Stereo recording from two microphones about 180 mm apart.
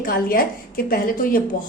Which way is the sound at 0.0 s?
55° left (ahead or behind).